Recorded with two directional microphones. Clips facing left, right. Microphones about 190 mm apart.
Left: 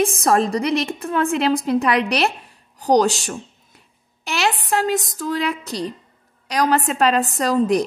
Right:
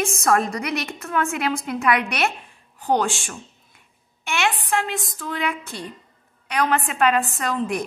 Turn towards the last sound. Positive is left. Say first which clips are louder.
# left 7 dB
turn(degrees=35)  # may be behind; listen again after turning